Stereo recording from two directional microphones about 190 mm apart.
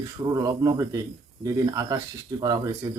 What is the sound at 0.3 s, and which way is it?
Speech, 20° right (ahead or behind).